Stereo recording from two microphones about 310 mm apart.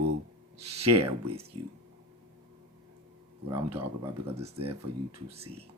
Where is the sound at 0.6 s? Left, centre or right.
Centre.